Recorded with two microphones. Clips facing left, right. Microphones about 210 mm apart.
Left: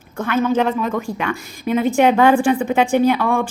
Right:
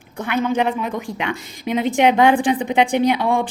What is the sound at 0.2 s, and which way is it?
A woman's voice, 15° right (ahead or behind).